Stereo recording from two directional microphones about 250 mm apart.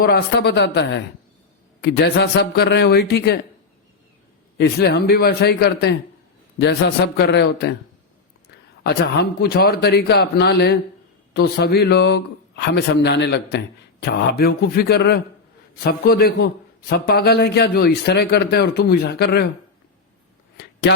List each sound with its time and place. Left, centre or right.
0.0 s a man's voice: left
4.5 s a man's voice: left
9.4 s a man's voice: left
20.9 s speech: left